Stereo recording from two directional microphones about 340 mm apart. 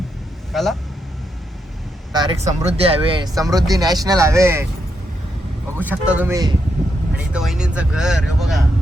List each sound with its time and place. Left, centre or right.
0.5 s speech: centre
2.1 s speech: centre
5.7 s speech: centre